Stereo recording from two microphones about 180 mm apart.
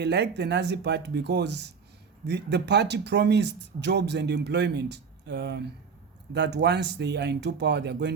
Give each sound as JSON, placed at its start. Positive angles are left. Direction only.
{"t": 0.0, "sound": "speech", "side_deg": -70}